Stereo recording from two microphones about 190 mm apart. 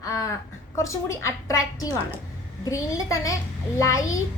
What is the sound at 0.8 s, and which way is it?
A woman's voice, 15° left (ahead or behind).